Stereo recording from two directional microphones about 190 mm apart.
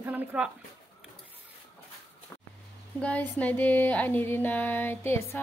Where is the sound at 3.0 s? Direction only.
5° left (ahead or behind).